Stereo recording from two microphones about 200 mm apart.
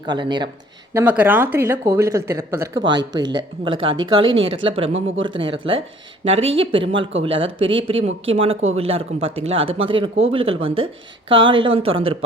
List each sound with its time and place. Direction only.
0.0 s speech: 20° right (ahead or behind)
0.9 s speech: 5° right (ahead or behind); by 4.3 s 20° right (ahead or behind)
4.3 s speech: 75° right (ahead or behind)
4.5 s speech: 25° right (ahead or behind)
8.7 s speech: 30° right (ahead or behind)